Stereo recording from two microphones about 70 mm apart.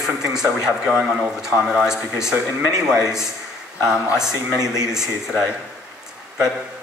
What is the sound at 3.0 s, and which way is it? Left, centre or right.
Speech, left.